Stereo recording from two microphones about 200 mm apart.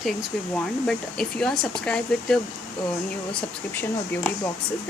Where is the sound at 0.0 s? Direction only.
Centre (ahead or behind).